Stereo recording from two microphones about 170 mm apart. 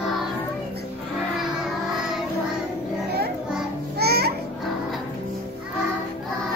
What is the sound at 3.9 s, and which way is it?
Music, 70° right (ahead or behind).